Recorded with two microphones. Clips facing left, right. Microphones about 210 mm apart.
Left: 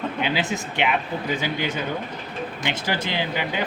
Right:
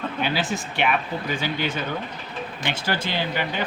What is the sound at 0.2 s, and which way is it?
A man's voice, 20° left (ahead or behind).